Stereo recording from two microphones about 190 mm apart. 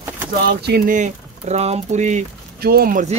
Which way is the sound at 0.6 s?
50° right (ahead or behind).